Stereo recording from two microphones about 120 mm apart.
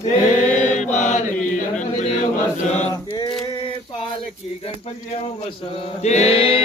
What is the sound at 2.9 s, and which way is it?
Male singing, 35° left (ahead or behind).